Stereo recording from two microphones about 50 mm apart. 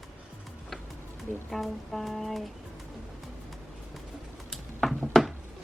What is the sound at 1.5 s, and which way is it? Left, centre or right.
Music, centre.